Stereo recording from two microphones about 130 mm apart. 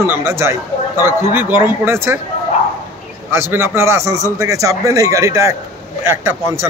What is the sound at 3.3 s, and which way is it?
A man's voice, 20° right (ahead or behind).